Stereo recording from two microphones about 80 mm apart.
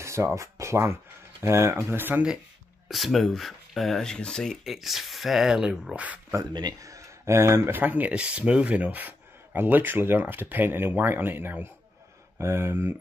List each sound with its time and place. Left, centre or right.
0.0 s speech: right
2.9 s speech: centre
6.8 s speech: right